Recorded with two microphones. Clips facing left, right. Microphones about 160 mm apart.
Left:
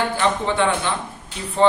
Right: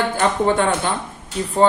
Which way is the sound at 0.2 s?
45° right (ahead or behind).